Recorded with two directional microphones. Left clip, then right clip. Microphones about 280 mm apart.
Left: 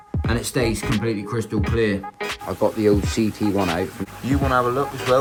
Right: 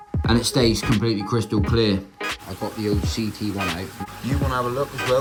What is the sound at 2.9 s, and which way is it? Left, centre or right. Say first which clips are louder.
Speech: left 4 dB; centre.